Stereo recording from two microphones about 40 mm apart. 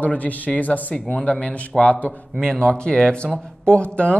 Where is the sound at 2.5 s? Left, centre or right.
Left.